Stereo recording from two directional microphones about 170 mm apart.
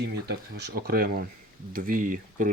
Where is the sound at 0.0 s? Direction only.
80° right.